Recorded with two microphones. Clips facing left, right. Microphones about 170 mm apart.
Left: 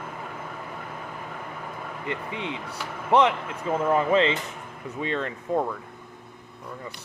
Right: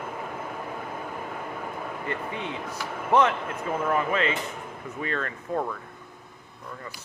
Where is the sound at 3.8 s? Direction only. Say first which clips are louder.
Left 5 dB; 30° left (ahead or behind).